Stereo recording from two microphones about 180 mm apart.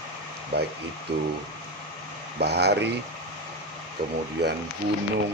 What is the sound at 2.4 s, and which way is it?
Speech, 65° right (ahead or behind).